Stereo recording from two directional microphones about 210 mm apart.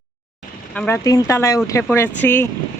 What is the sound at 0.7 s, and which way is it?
Speech, 10° left (ahead or behind).